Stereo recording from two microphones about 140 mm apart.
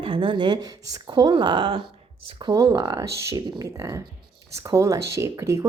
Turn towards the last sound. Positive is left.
turn(degrees=-20)  # may be behind; listen again after turning